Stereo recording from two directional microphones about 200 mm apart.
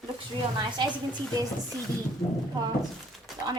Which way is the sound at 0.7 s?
20° right (ahead or behind).